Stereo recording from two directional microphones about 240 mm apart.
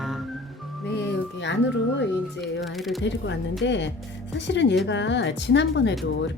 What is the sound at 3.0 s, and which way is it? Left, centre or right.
Speech, left.